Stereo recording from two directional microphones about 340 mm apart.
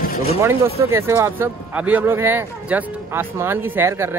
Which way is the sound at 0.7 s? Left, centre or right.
Centre.